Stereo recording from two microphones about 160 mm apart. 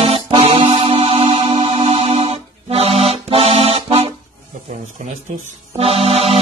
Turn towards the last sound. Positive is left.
turn(degrees=-40)  # may be behind; listen again after turning